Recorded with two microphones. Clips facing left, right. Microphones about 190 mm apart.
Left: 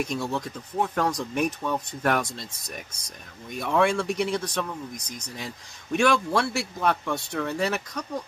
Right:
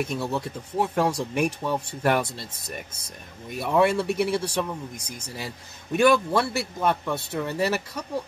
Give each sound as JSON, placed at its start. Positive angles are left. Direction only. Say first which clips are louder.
{"t": 0.0, "sound": "speech", "louder": "right 1 dB", "side_deg": -5}
{"t": 3.4, "sound": "a man's voice", "louder": "right 2 dB", "side_deg": -5}